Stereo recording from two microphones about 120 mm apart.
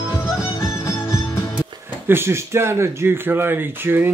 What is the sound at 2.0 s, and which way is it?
Speech, 20° right (ahead or behind).